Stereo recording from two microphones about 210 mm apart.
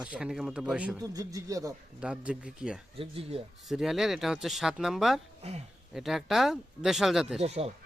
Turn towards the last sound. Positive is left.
turn(degrees=-30)  # may be behind; listen again after turning